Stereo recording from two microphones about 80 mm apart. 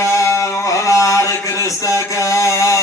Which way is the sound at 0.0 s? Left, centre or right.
Left.